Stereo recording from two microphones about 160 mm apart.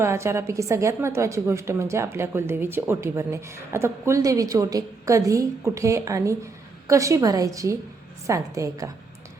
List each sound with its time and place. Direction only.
0.0 s a woman's voice: 15° right (ahead or behind)